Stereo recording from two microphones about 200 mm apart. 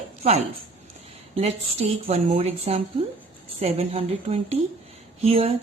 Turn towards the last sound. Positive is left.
turn(degrees=-30)  # may be behind; listen again after turning